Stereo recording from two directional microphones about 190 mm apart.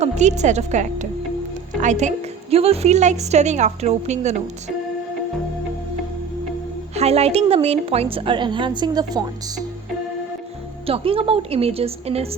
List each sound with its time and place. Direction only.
0.0 s a woman's voice: 40° right (ahead or behind)
6.9 s a woman's voice: 35° right (ahead or behind)
10.8 s a woman's voice: 30° right (ahead or behind)